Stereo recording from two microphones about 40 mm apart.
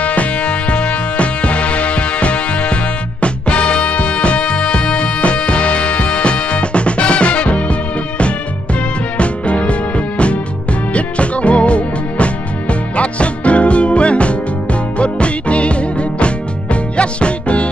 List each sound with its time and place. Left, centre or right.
0.0 s music: left
9.2 s music: left